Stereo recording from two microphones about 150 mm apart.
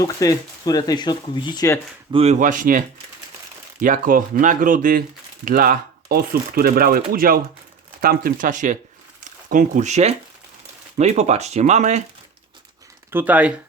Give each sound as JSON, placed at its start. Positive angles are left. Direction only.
{"t": 0.0, "sound": "speech", "side_deg": 25}
{"t": 2.1, "sound": "speech", "side_deg": -45}
{"t": 13.1, "sound": "speech", "side_deg": -10}